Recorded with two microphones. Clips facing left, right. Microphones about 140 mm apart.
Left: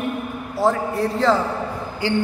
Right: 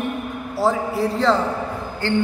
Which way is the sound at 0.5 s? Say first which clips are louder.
Even; centre (ahead or behind).